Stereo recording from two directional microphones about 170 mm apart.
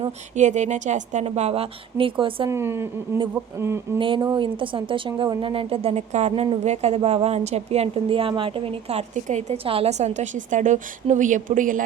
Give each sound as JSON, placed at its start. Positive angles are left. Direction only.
{"t": 0.3, "sound": "a woman's voice", "side_deg": -45}
{"t": 2.5, "sound": "a woman's voice", "side_deg": -15}
{"t": 3.9, "sound": "a woman's voice", "side_deg": -30}